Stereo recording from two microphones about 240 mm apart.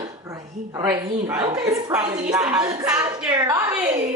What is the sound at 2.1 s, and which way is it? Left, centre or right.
Speech, centre.